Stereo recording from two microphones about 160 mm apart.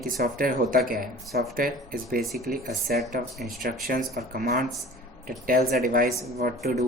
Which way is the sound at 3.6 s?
65° right (ahead or behind).